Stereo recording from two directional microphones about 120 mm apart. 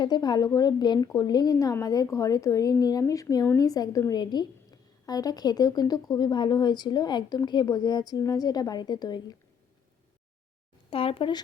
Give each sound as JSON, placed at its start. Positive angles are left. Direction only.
{"t": 0.0, "sound": "a woman's voice", "side_deg": 35}
{"t": 10.8, "sound": "speech", "side_deg": 50}